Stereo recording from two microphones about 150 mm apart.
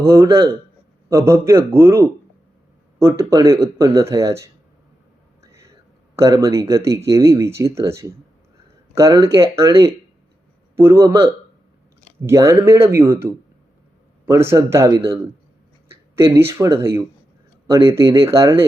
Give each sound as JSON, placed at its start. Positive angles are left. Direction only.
{"t": 0.1, "sound": "speech", "side_deg": -20}
{"t": 5.4, "sound": "whispering", "side_deg": -20}
{"t": 6.1, "sound": "speech", "side_deg": -20}
{"t": 16.1, "sound": "speech", "side_deg": -15}